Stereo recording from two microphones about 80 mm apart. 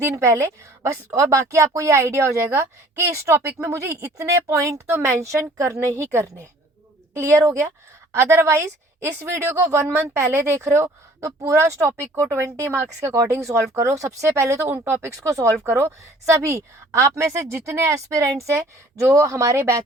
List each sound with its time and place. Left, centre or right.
0.0 s a woman's voice: right